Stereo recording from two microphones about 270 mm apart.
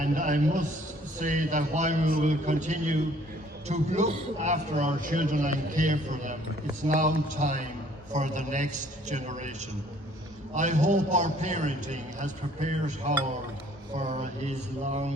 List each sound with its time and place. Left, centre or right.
0.0 s a man's voice: right